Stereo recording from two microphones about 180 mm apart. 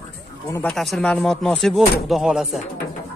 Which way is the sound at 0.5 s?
5° left (ahead or behind).